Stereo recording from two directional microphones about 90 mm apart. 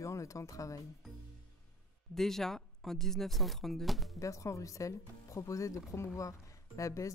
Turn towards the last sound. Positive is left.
turn(degrees=35)  # may be behind; listen again after turning